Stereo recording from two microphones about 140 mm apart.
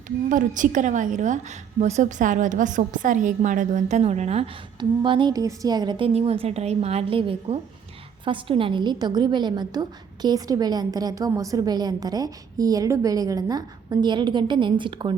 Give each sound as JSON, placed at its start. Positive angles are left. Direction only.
{"t": 0.3, "sound": "a woman's voice", "side_deg": -65}
{"t": 4.8, "sound": "a woman's voice", "side_deg": -35}
{"t": 6.1, "sound": "a woman's voice", "side_deg": -45}